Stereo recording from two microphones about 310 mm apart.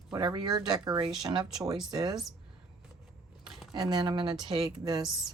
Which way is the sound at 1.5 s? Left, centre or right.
Centre.